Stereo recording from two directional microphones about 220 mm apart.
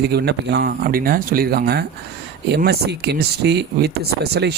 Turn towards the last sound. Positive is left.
turn(degrees=-45)  # may be behind; listen again after turning